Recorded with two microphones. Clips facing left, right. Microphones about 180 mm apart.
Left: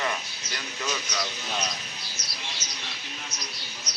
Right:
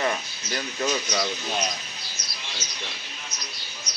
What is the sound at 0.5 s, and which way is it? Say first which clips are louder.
Speech: right 6 dB; 40° right (ahead or behind).